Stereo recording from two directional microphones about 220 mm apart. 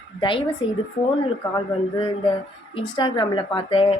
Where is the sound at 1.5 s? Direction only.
20° left (ahead or behind).